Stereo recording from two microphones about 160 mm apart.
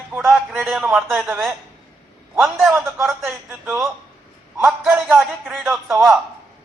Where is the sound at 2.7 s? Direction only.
15° right (ahead or behind); by 5.9 s centre (ahead or behind).